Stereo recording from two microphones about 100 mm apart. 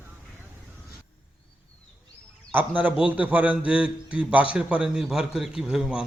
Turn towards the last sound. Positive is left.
turn(degrees=-5)  # may be behind; listen again after turning